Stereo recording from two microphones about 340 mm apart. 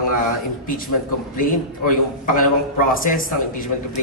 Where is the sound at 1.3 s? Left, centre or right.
Left.